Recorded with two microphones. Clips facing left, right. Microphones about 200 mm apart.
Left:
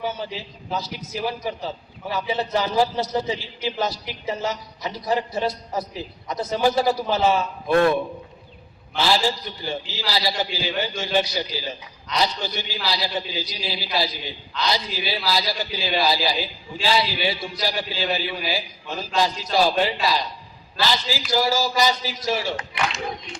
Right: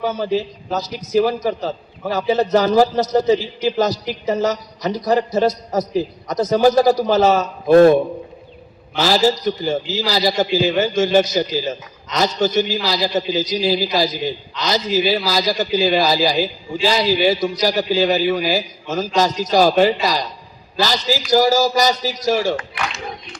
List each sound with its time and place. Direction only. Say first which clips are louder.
0.0 s a man's voice: right 9 dB; 45° right (ahead or behind)
9.0 s a man's voice: right 6 dB; 40° right (ahead or behind)